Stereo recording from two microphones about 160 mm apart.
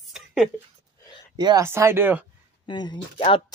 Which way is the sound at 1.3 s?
25° right (ahead or behind).